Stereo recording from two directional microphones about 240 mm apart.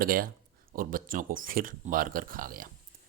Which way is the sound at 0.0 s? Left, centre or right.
Right.